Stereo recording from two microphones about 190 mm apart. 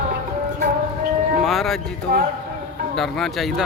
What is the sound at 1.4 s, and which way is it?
Speech, centre (ahead or behind).